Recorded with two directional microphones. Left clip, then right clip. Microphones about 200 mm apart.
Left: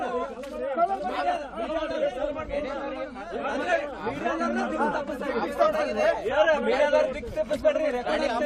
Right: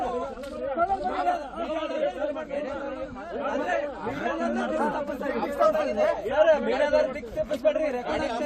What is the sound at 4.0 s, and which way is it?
Speech, 5° left (ahead or behind).